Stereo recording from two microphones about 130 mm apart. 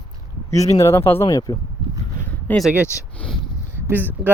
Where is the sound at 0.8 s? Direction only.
20° left (ahead or behind).